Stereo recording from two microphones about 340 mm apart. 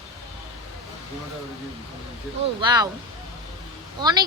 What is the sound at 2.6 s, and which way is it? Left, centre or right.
Speech, centre.